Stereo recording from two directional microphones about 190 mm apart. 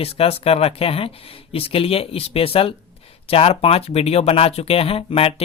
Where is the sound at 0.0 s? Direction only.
30° left (ahead or behind).